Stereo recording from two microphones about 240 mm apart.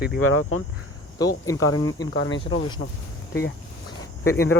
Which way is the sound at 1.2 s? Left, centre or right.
Centre.